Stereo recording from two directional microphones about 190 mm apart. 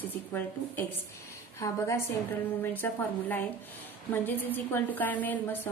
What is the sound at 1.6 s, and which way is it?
A woman's voice, 15° left (ahead or behind).